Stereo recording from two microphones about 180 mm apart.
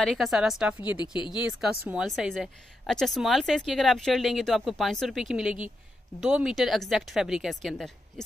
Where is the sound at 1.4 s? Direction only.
5° right (ahead or behind).